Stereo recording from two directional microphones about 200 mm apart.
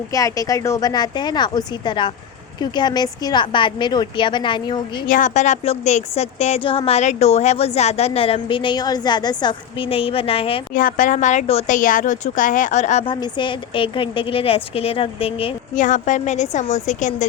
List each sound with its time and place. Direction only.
0.1 s a woman's voice: 15° left (ahead or behind)
5.0 s a woman's voice: 40° left (ahead or behind)
10.8 s a woman's voice: 40° left (ahead or behind)